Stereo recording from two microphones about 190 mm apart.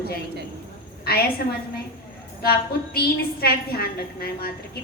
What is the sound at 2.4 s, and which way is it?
A woman's voice, 55° left (ahead or behind).